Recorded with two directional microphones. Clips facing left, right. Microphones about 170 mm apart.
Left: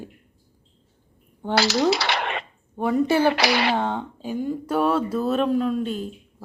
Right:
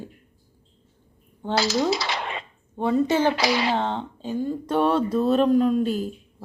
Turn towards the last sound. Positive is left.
turn(degrees=-5)  # may be behind; listen again after turning